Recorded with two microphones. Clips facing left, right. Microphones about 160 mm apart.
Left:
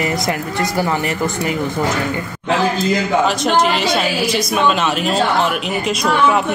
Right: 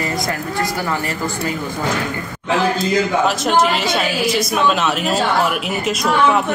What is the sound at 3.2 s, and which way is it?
Speech, centre (ahead or behind).